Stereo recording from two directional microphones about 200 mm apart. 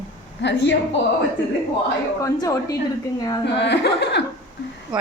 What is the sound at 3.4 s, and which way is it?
Speech, 60° left (ahead or behind).